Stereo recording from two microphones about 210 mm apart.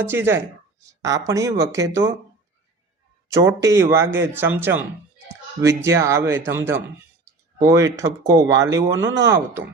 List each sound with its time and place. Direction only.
0.0 s speech: 10° right (ahead or behind)
3.3 s speech: 15° right (ahead or behind)